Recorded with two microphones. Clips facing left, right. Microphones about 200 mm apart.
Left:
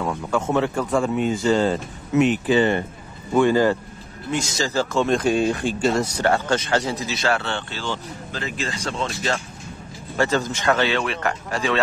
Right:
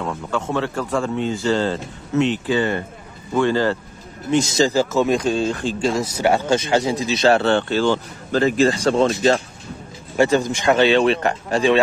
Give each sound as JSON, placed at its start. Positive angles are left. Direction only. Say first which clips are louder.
{"t": 0.1, "sound": "speech", "louder": "left 3 dB", "side_deg": 15}
{"t": 4.3, "sound": "speech", "louder": "right 8 dB", "side_deg": -20}
{"t": 4.7, "sound": "speech", "louder": "right 3 dB", "side_deg": -5}
{"t": 5.2, "sound": "speech", "louder": "left 1 dB", "side_deg": 15}
{"t": 5.8, "sound": "speech", "louder": "even", "side_deg": 0}
{"t": 6.2, "sound": "speech", "louder": "right 6 dB", "side_deg": -10}
{"t": 7.4, "sound": "speech", "louder": "right 11 dB", "side_deg": -50}
{"t": 10.1, "sound": "speech", "louder": "right 5 dB", "side_deg": -15}